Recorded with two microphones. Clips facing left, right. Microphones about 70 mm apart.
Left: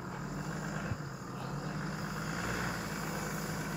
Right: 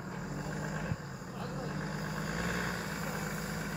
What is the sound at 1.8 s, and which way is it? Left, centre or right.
Vehicle, right.